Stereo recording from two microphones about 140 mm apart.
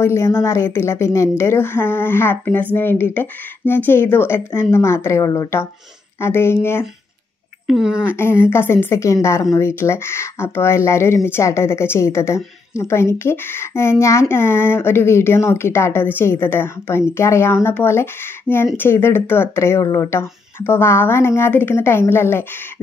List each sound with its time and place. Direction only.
0.0 s a woman's voice: 20° left (ahead or behind)
7.6 s speech: 5° right (ahead or behind)
8.1 s a woman's voice: 15° left (ahead or behind)